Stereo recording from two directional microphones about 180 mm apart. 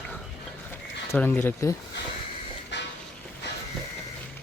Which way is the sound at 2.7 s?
75° left (ahead or behind).